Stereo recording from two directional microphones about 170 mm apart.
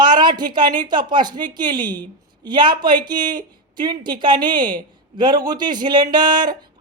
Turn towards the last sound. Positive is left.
turn(degrees=-25)  # may be behind; listen again after turning